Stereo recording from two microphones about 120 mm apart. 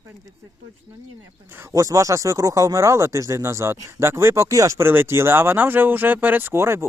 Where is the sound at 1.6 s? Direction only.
25° right (ahead or behind).